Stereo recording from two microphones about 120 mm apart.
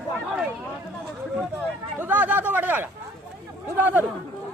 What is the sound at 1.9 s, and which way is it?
Speech, 15° right (ahead or behind).